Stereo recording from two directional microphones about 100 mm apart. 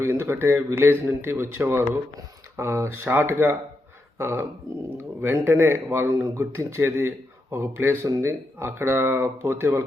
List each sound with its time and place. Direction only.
0.0 s speech: 25° right (ahead or behind)